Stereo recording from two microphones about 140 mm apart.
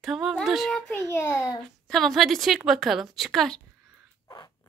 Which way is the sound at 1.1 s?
20° left (ahead or behind).